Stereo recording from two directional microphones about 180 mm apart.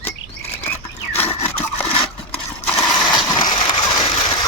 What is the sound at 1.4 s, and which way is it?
Sawing, 35° left (ahead or behind).